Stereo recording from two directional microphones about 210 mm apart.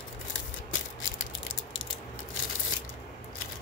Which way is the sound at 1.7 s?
70° left (ahead or behind).